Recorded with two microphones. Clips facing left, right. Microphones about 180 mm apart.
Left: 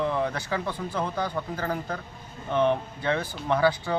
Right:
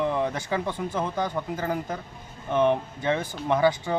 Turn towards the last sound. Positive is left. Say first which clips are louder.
# right 1 dB
turn(degrees=-20)  # may be behind; listen again after turning